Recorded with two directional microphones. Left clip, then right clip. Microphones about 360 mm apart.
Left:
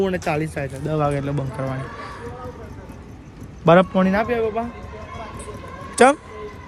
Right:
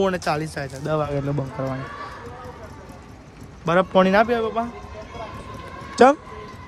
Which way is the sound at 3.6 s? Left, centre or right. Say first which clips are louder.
Left 6 dB; centre.